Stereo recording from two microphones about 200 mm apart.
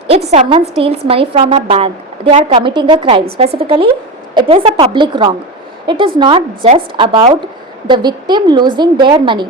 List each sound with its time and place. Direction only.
0.1 s a woman's voice: 30° right (ahead or behind)